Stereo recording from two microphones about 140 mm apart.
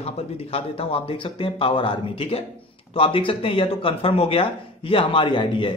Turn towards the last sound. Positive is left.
turn(degrees=35)  # may be behind; listen again after turning